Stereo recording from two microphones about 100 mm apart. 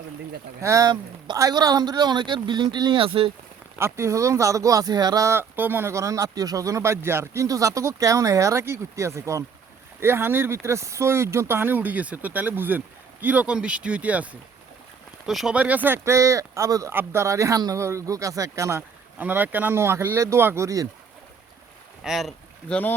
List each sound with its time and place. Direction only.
0.6 s speech: 35° right (ahead or behind); by 3.3 s 65° right (ahead or behind)
3.8 s speech: 25° right (ahead or behind)
15.3 s speech: centre (ahead or behind)
15.5 s speech: 15° right (ahead or behind); by 16.9 s 35° right (ahead or behind)
16.9 s speech: 20° right (ahead or behind)
18.8 s speech: 20° right (ahead or behind)
22.0 s speech: centre (ahead or behind)
22.7 s speech: 20° left (ahead or behind)